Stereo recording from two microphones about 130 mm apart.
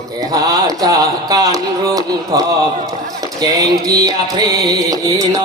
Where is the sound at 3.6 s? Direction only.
30° right (ahead or behind).